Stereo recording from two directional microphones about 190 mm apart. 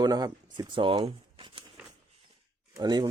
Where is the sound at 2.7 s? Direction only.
20° right (ahead or behind).